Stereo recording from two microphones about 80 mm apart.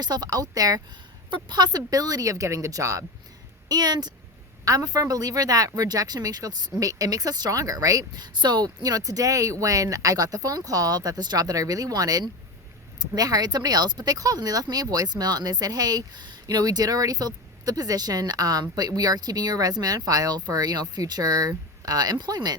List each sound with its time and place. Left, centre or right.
0.0 s speech: right
1.3 s speech: right
3.7 s speech: right